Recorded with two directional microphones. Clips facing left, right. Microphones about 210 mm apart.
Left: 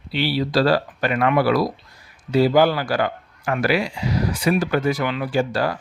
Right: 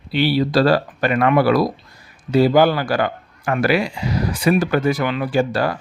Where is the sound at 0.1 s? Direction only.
50° right (ahead or behind).